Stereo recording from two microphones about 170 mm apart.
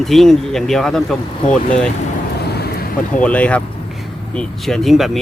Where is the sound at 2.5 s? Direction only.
65° left (ahead or behind).